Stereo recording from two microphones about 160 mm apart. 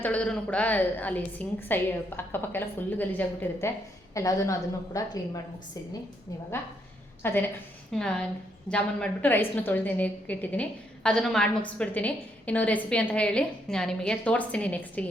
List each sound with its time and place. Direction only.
0.0 s a woman's voice: 10° left (ahead or behind)
7.2 s a woman's voice: 10° left (ahead or behind)